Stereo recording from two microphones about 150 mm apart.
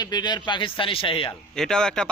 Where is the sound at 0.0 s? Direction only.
25° left (ahead or behind).